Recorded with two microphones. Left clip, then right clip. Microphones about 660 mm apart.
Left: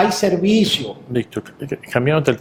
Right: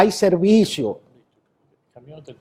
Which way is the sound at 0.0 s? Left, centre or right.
Right.